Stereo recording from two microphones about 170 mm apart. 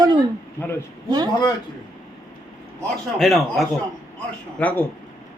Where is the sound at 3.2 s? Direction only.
Centre (ahead or behind).